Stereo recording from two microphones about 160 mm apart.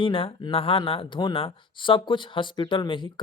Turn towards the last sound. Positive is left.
turn(degrees=30)  # may be behind; listen again after turning